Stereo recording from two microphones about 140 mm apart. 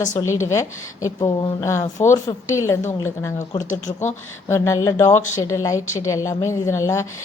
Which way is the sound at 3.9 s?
60° left (ahead or behind).